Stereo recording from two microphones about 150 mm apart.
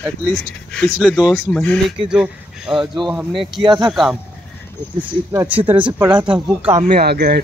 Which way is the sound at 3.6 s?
30° right (ahead or behind).